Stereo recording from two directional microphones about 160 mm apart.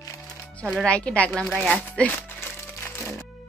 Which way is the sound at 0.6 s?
Centre (ahead or behind).